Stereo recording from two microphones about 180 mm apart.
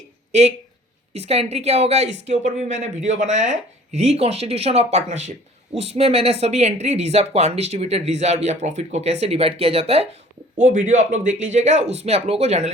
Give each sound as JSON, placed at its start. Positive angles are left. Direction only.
{"t": 0.3, "sound": "speech", "side_deg": -40}